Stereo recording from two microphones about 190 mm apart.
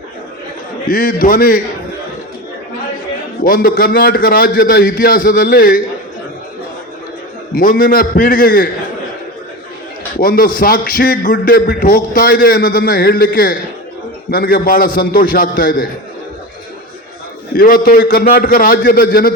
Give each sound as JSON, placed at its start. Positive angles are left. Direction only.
{"t": 0.9, "sound": "speech", "side_deg": 45}
{"t": 3.4, "sound": "speech", "side_deg": 50}
{"t": 7.5, "sound": "speech", "side_deg": 45}
{"t": 10.2, "sound": "speech", "side_deg": 50}
{"t": 17.5, "sound": "speech", "side_deg": 50}